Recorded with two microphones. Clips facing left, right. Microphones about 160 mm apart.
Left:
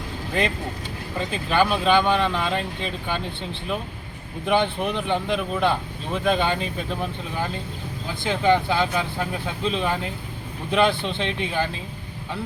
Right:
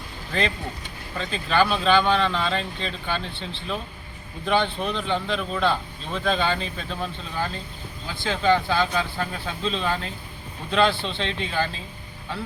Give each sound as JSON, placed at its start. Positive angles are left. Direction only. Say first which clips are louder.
{"t": 1.2, "sound": "speech", "louder": "left 1 dB", "side_deg": 15}